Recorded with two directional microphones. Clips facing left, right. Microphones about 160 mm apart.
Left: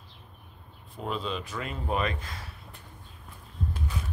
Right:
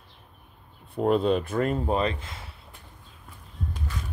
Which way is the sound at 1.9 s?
30° right (ahead or behind).